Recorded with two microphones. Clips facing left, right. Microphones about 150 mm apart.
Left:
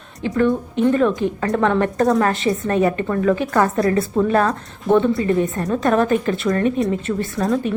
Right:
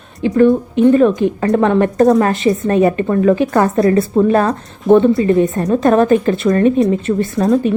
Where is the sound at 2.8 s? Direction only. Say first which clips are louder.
Right 6 dB; 30° right (ahead or behind).